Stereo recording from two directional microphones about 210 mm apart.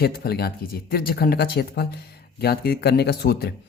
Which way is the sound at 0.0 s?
50° left (ahead or behind).